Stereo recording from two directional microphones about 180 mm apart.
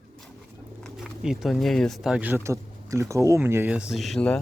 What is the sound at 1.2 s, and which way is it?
Speech, centre (ahead or behind).